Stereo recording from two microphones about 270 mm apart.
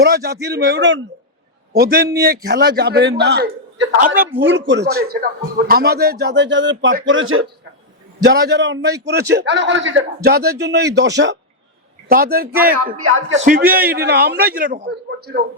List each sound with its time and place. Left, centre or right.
0.0 s speech: right
4.4 s speech: right
8.2 s speech: right
13.0 s a man's voice: right
13.4 s speech: right